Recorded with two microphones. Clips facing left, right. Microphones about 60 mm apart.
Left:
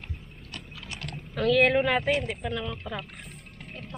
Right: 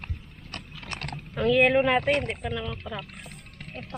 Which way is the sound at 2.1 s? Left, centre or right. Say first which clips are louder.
Right 2 dB; right.